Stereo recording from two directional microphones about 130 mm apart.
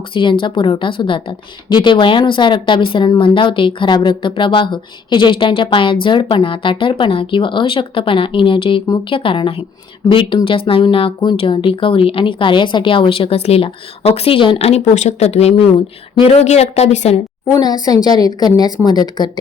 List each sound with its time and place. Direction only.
0.1 s speech: 40° left (ahead or behind); by 17.2 s 60° left (ahead or behind)
17.5 s speech: 30° left (ahead or behind)